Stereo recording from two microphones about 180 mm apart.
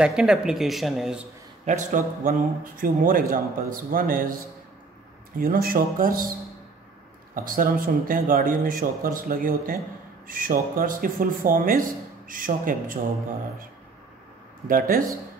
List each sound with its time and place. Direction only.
0.0 s speech: 5° right (ahead or behind)
1.7 s speech: 45° right (ahead or behind)
5.4 s speech: 55° right (ahead or behind)
7.3 s speech: 50° right (ahead or behind)
14.7 s speech: 50° right (ahead or behind)